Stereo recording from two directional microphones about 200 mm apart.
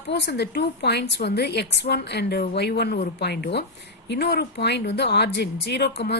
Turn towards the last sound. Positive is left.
turn(degrees=55)  # may be behind; listen again after turning